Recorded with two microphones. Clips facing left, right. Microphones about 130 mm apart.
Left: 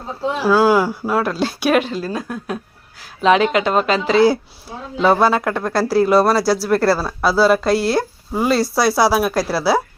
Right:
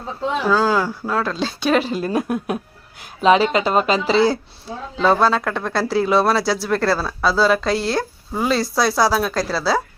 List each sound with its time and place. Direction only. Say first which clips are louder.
0.4 s speech: left 5 dB; 10° left (ahead or behind)
2.0 s speech: right 3 dB; 25° right (ahead or behind)
3.2 s speech: even; 5° right (ahead or behind)